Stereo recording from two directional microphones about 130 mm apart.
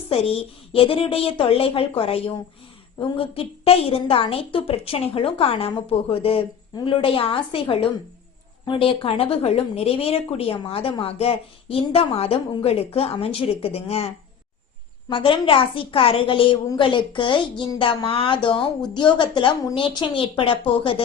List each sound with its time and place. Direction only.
0.1 s a woman's voice: 45° left (ahead or behind)
15.1 s a woman's voice: 40° left (ahead or behind)